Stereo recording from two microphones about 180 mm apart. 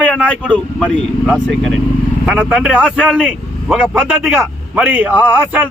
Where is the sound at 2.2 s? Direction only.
5° right (ahead or behind).